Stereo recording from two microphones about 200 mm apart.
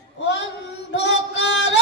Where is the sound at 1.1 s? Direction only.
65° left (ahead or behind).